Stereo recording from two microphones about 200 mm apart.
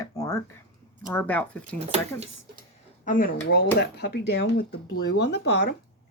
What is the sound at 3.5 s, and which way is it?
Speech, 55° left (ahead or behind).